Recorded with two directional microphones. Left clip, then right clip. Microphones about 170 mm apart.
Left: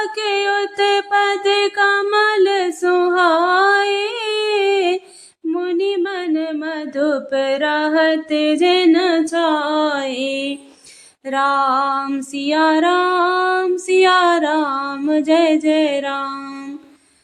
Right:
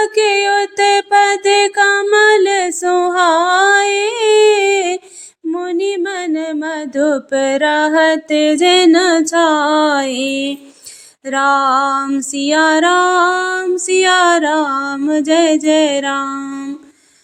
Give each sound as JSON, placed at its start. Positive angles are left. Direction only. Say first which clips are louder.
{"t": 0.0, "sound": "mantra", "louder": "right 6 dB", "side_deg": -20}
{"t": 11.3, "sound": "music", "louder": "right 4 dB", "side_deg": -25}